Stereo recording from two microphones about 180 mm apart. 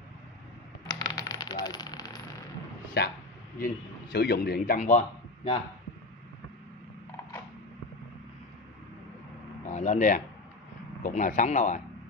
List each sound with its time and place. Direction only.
0.9 s coin: 20° left (ahead or behind)
3.0 s a man's voice: 65° left (ahead or behind); by 5.6 s 35° left (ahead or behind)
9.7 s speech: 40° left (ahead or behind)